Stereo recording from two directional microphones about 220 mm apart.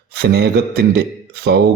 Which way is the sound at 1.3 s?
45° right (ahead or behind).